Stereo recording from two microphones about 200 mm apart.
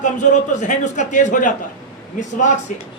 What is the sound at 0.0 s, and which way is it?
A man's voice, 40° left (ahead or behind).